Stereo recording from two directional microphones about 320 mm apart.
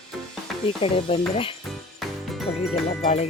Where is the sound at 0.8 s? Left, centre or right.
Centre.